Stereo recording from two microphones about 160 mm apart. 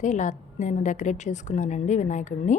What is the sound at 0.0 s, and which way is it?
A woman's voice, 50° left (ahead or behind).